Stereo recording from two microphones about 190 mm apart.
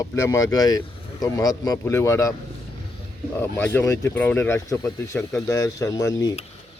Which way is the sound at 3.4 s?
10° left (ahead or behind).